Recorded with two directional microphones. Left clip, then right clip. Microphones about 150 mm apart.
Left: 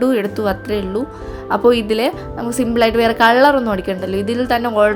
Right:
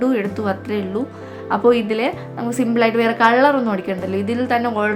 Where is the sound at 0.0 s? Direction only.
35° left (ahead or behind).